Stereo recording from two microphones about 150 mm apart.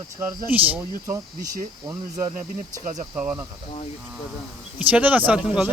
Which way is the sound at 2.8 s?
55° right (ahead or behind).